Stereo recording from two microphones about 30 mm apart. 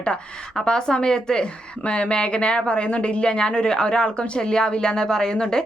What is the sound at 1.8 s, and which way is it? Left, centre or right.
Speech, left.